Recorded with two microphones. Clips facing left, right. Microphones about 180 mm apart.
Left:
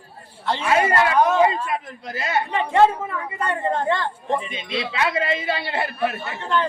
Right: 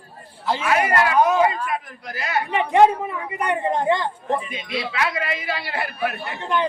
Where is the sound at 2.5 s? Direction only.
15° right (ahead or behind).